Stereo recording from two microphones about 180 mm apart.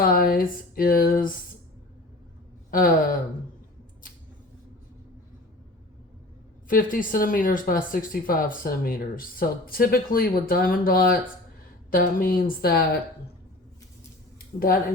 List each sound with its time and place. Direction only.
0.0 s speech: 55° left (ahead or behind)
2.6 s gasp: 50° left (ahead or behind)
6.7 s speech: 50° left (ahead or behind)
14.3 s a sound: 55° left (ahead or behind)